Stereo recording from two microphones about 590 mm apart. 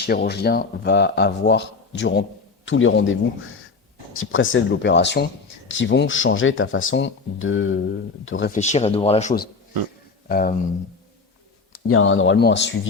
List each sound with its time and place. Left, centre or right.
0.0 s speech: centre
11.7 s speech: left